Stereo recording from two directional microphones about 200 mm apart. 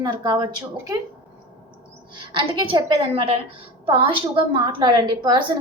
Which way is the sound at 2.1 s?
25° right (ahead or behind).